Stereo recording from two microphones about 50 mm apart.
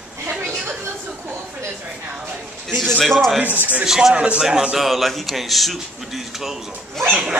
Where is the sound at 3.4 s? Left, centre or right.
Right.